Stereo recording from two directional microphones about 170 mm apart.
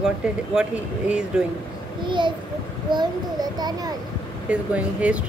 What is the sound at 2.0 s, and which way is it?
A child's voice, 25° right (ahead or behind).